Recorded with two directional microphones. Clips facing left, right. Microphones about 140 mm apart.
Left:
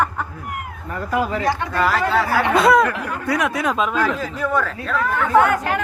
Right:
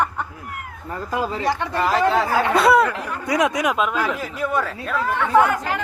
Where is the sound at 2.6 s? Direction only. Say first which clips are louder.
Left 1 dB; 5° right (ahead or behind).